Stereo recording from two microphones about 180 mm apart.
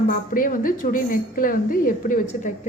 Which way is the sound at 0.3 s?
50° left (ahead or behind).